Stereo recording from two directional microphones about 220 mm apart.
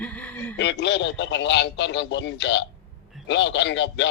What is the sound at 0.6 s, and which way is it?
Speech, 55° left (ahead or behind).